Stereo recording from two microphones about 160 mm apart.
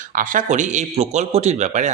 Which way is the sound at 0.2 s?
50° right (ahead or behind).